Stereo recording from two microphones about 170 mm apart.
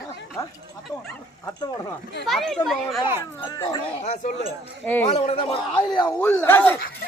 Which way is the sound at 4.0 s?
45° left (ahead or behind).